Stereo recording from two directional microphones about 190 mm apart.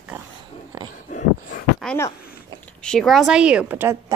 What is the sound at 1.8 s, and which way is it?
Speech, centre (ahead or behind).